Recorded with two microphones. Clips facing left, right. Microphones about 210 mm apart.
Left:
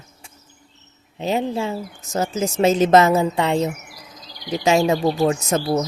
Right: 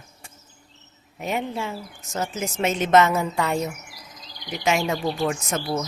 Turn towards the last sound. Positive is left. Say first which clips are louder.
# left 6 dB
turn(degrees=30)  # may be behind; listen again after turning